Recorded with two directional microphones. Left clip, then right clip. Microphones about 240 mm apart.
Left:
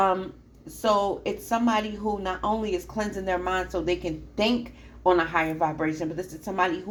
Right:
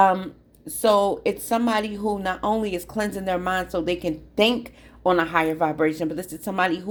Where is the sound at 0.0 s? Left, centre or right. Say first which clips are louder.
Right 5 dB; right.